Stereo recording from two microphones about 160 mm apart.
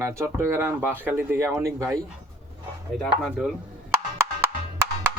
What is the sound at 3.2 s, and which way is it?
Speech, centre (ahead or behind).